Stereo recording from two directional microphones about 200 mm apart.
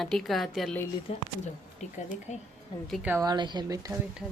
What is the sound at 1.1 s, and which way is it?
Speech, 30° left (ahead or behind).